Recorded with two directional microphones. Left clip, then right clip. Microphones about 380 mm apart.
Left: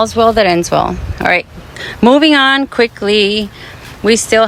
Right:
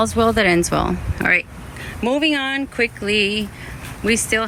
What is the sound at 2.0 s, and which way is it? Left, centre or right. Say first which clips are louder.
Speech: left 12 dB; left.